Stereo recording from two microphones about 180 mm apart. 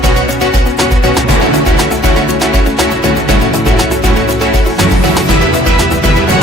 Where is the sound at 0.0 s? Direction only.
Centre (ahead or behind).